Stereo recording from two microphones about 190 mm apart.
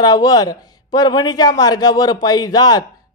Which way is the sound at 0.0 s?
20° left (ahead or behind).